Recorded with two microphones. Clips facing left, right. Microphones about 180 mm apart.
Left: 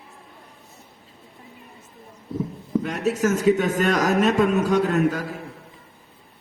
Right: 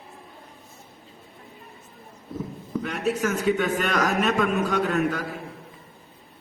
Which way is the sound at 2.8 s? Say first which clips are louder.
Left 1 dB; 40° left (ahead or behind).